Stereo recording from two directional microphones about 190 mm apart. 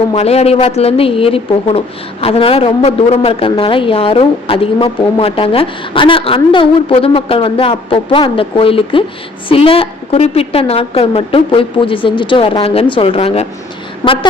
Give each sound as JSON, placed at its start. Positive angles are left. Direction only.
{"t": 0.1, "sound": "a woman's voice", "side_deg": 35}